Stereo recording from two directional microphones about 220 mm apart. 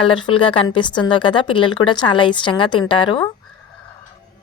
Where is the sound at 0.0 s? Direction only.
25° left (ahead or behind).